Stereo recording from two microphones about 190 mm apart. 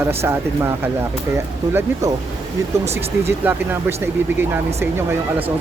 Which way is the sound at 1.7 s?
15° right (ahead or behind).